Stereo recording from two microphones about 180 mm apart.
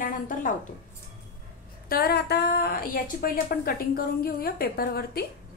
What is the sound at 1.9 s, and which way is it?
A woman's voice, 60° left (ahead or behind).